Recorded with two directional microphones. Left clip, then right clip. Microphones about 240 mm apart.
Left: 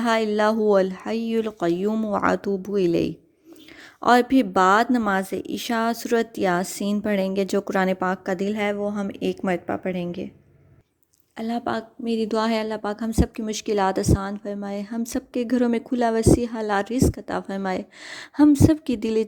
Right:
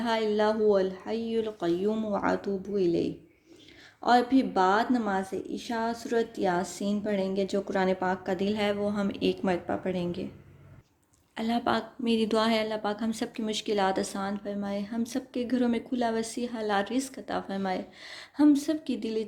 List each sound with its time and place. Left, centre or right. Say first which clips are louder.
0.0 s speech: left 6 dB; left
6.6 s a woman's voice: left 5 dB; centre
6.8 s a woman's voice: left 6 dB; left
11.3 s a woman's voice: left 1 dB; left